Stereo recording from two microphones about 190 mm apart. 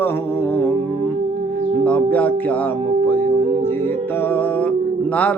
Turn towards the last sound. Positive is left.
turn(degrees=10)  # may be behind; listen again after turning